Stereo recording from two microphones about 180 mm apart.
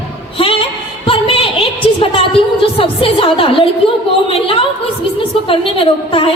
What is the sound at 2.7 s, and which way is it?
A woman's voice, 30° left (ahead or behind).